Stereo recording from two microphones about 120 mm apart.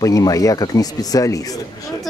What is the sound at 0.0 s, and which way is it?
Speech, 30° left (ahead or behind).